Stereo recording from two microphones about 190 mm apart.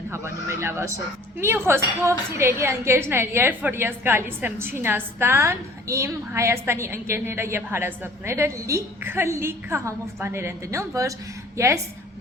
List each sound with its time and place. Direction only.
0.1 s a woman's voice: 15° right (ahead or behind)